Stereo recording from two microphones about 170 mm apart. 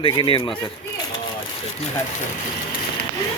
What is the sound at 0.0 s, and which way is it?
Speech, 30° left (ahead or behind).